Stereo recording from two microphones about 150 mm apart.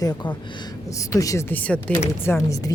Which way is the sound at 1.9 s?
10° left (ahead or behind).